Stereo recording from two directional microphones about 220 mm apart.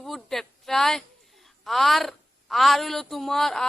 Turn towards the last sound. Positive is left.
turn(degrees=0)  # may be behind; listen again after turning